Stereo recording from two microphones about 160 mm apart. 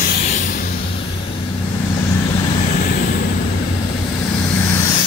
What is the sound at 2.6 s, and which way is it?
Vehicle, 55° left (ahead or behind).